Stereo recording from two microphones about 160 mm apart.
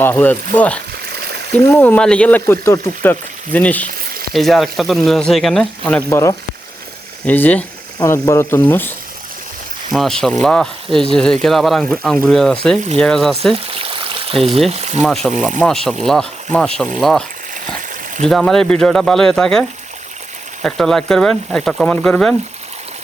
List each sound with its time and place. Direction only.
0.0 s speech: 10° left (ahead or behind)
6.1 s speech: 15° left (ahead or behind)
9.9 s speech: centre (ahead or behind)
13.5 s a sound: 35° right (ahead or behind)
14.7 s speech: 45° right (ahead or behind)
15.0 s speech: centre (ahead or behind)